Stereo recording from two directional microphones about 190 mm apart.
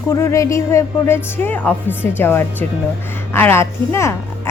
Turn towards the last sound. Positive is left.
turn(degrees=15)  # may be behind; listen again after turning